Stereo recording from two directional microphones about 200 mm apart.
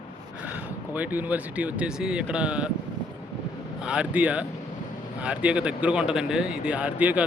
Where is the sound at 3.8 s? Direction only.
5° right (ahead or behind).